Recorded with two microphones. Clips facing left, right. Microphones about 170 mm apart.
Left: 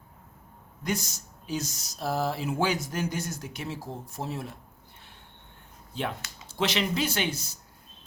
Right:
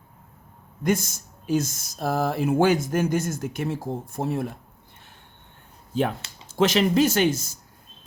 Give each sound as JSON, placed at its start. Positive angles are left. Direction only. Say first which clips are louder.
{"t": 0.9, "sound": "speech", "louder": "right 8 dB", "side_deg": -50}
{"t": 5.9, "sound": "speech", "louder": "right 8 dB", "side_deg": -45}